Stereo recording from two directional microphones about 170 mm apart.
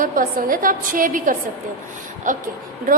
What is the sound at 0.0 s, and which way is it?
A woman's voice, 50° right (ahead or behind).